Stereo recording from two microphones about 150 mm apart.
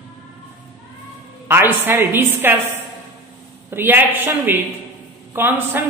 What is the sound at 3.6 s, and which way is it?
A man's voice, 15° right (ahead or behind).